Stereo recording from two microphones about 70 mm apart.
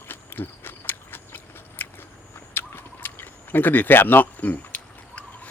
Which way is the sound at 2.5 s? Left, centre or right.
Left.